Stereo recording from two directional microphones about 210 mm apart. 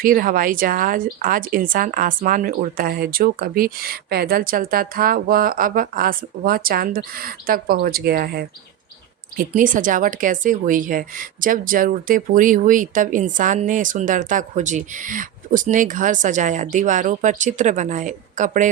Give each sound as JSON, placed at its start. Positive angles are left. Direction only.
{"t": 0.0, "sound": "a woman's voice", "side_deg": -40}